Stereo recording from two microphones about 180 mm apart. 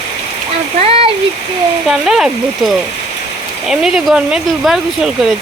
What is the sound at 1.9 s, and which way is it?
Speech, centre (ahead or behind).